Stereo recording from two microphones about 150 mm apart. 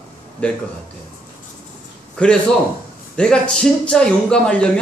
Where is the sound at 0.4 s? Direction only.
10° left (ahead or behind).